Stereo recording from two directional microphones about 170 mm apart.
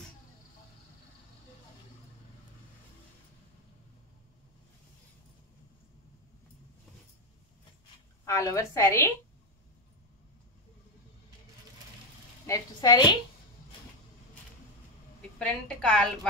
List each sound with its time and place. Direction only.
8.3 s a woman's voice: 20° left (ahead or behind)
12.4 s a woman's voice: 20° left (ahead or behind)
15.3 s a woman's voice: 5° left (ahead or behind)